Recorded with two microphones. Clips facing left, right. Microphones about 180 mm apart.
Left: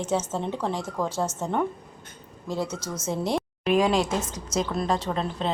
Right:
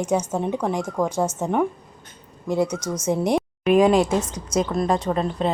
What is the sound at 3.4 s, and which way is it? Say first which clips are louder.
A woman's voice: right 5 dB; centre (ahead or behind).